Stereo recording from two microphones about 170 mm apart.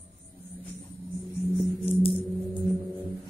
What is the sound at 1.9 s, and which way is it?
Music, 35° left (ahead or behind).